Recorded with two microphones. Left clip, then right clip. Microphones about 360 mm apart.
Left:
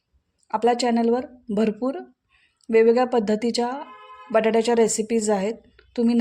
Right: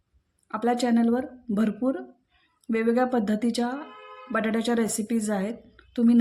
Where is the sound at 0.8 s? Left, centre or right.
Centre.